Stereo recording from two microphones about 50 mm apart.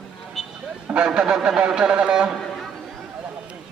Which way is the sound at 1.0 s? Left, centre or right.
Centre.